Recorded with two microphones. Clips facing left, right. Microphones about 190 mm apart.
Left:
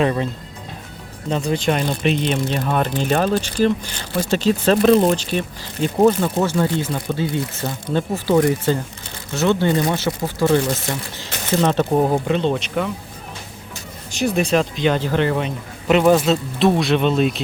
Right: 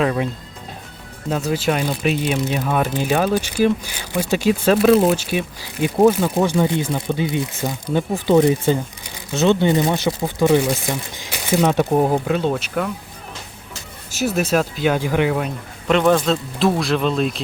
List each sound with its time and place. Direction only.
1.3 s speech: 5° right (ahead or behind)
14.1 s speech: 5° right (ahead or behind)